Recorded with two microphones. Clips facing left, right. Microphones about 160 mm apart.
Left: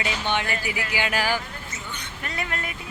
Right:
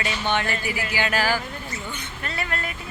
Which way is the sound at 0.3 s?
15° left (ahead or behind).